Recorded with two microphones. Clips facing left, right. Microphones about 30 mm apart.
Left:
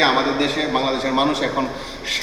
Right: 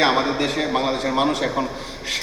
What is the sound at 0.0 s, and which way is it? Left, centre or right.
A man's voice, centre.